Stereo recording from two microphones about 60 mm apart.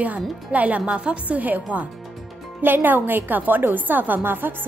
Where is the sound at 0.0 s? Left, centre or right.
Right.